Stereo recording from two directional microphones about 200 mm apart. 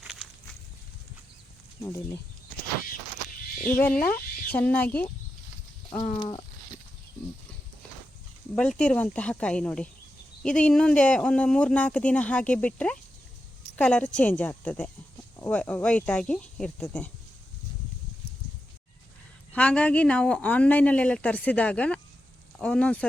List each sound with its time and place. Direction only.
0.0 s walk: centre (ahead or behind)
3.9 s speech: 45° left (ahead or behind)
4.5 s a woman's voice: 10° left (ahead or behind)
5.9 s a sound: 25° left (ahead or behind)
8.5 s a woman's voice: 5° left (ahead or behind)
19.5 s a woman's voice: 5° left (ahead or behind)